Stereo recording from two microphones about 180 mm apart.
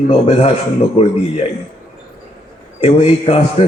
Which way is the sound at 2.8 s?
35° left (ahead or behind).